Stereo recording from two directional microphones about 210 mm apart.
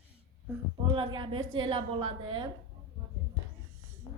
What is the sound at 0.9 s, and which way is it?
A woman's voice, 25° right (ahead or behind).